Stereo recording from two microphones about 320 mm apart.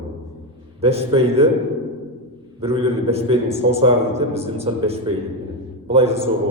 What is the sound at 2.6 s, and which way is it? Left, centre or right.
A man's voice, centre.